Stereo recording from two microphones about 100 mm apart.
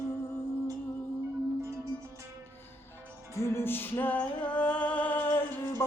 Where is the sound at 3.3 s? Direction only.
25° left (ahead or behind).